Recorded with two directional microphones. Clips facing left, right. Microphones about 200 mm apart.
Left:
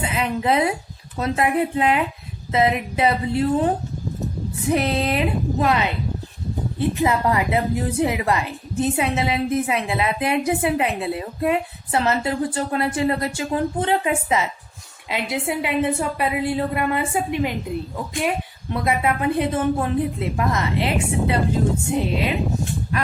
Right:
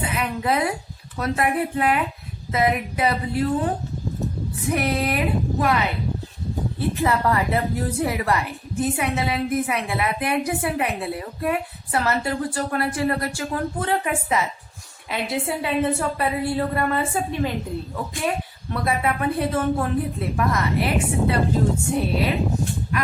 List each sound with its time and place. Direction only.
0.0 s a sound: 25° left (ahead or behind)
1.1 s a woman's voice: 25° left (ahead or behind)
4.7 s a woman's voice: 25° left (ahead or behind)